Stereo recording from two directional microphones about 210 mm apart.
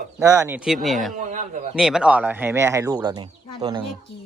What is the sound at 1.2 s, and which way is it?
Speech, 35° right (ahead or behind).